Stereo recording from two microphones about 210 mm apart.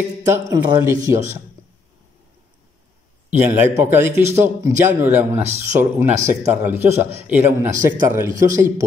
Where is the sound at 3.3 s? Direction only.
10° right (ahead or behind).